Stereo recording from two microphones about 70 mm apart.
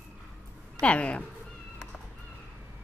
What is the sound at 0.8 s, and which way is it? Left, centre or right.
Speech, centre.